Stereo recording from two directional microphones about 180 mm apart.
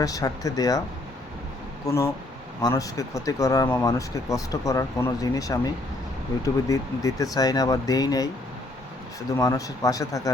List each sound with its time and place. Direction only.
0.0 s speech: 20° left (ahead or behind)
1.9 s speech: 20° left (ahead or behind)
9.3 s speech: 20° left (ahead or behind)